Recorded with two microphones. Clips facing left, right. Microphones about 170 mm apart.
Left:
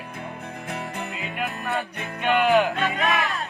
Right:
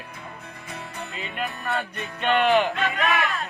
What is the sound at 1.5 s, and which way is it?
Music, 20° left (ahead or behind).